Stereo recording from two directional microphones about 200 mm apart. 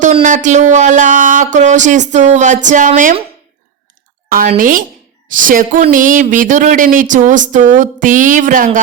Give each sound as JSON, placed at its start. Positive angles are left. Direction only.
{"t": 0.0, "sound": "speech", "side_deg": -40}
{"t": 4.3, "sound": "a woman's voice", "side_deg": -45}